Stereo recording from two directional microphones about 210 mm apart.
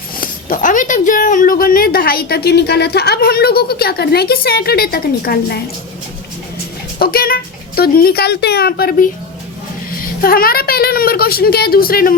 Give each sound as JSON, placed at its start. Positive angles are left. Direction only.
{"t": 0.2, "sound": "speech", "side_deg": 40}
{"t": 7.0, "sound": "speech", "side_deg": 45}